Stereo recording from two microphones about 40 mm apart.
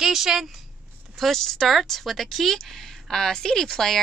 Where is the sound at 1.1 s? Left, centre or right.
Centre.